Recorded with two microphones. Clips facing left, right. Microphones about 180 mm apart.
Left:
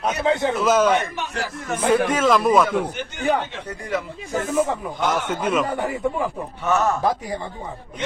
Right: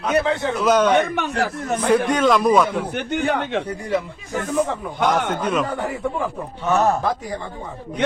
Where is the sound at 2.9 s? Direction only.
60° right (ahead or behind).